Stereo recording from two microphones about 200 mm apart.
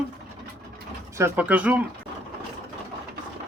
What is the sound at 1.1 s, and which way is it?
Speech, 10° right (ahead or behind).